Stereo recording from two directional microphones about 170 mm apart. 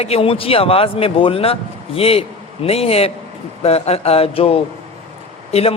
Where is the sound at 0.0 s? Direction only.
35° left (ahead or behind).